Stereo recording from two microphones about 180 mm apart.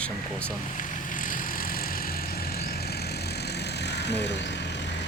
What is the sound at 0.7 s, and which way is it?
Vehicle, 45° left (ahead or behind).